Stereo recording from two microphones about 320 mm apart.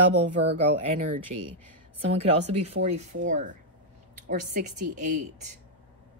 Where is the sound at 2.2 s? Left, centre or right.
Centre.